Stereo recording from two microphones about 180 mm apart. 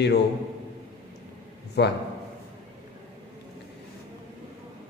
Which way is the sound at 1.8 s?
70° left (ahead or behind).